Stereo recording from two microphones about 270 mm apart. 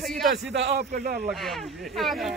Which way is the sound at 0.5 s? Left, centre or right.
Right.